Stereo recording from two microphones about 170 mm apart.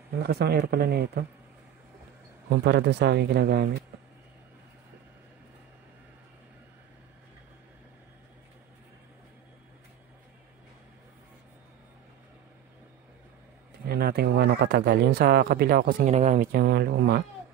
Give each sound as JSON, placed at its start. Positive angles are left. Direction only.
{"t": 0.2, "sound": "speech", "side_deg": -70}
{"t": 2.6, "sound": "speech", "side_deg": -70}
{"t": 13.8, "sound": "speech", "side_deg": -65}
{"t": 16.0, "sound": "speech", "side_deg": -40}
{"t": 16.5, "sound": "speech", "side_deg": -70}